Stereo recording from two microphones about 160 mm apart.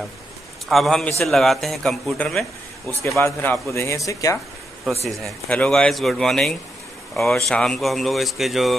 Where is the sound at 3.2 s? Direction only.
15° left (ahead or behind).